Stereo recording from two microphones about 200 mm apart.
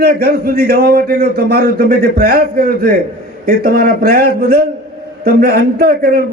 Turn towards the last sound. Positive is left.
turn(degrees=-50)  # may be behind; listen again after turning